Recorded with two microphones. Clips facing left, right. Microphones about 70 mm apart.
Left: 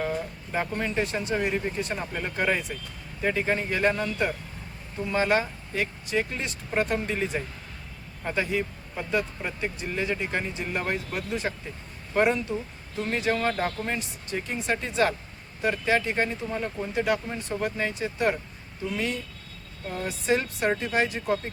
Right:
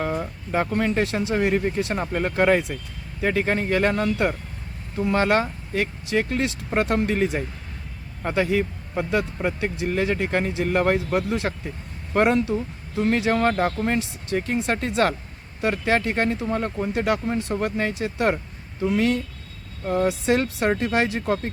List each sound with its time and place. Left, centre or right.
0.0 s speech: right
2.1 s speech: right
3.2 s speech: right
13.5 s speech: right